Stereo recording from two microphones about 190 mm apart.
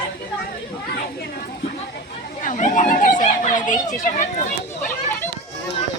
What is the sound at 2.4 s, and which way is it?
Speech, 40° left (ahead or behind).